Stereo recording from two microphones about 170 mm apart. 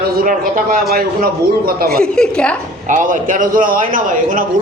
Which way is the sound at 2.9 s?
50° right (ahead or behind).